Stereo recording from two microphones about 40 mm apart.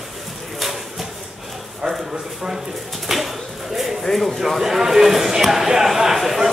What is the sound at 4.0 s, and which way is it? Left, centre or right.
Speech, centre.